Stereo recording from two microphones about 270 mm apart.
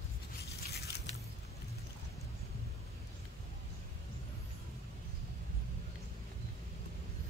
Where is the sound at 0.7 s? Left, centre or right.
Left.